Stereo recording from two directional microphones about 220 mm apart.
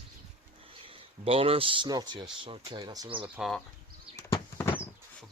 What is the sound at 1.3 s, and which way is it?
Speech, 25° right (ahead or behind).